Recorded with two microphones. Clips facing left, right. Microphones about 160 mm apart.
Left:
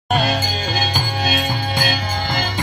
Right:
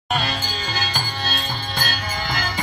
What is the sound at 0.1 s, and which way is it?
Music, 55° left (ahead or behind).